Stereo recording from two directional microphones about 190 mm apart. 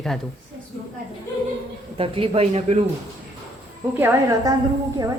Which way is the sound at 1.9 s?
30° right (ahead or behind).